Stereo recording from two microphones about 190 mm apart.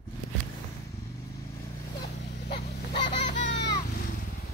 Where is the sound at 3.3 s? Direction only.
65° left (ahead or behind).